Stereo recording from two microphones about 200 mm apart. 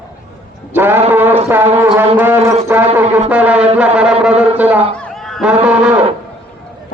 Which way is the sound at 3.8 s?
5° right (ahead or behind).